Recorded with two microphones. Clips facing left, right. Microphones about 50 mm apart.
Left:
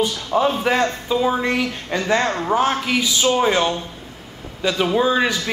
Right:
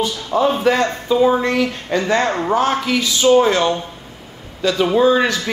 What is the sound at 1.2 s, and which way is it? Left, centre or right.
Speech, centre.